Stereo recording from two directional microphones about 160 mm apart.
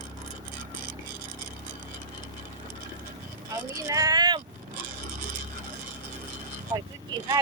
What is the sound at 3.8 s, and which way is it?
Speech, 20° right (ahead or behind).